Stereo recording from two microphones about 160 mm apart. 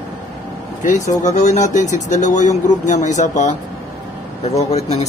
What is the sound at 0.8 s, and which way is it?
Speech, 50° left (ahead or behind).